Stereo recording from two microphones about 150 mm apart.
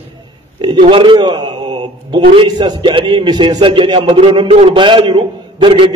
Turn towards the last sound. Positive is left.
turn(degrees=-35)  # may be behind; listen again after turning